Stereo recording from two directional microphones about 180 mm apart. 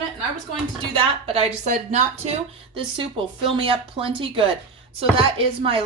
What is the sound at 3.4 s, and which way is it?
A woman's voice, 30° right (ahead or behind).